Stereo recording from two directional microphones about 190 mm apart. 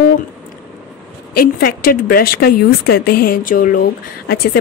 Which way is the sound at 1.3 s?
50° left (ahead or behind).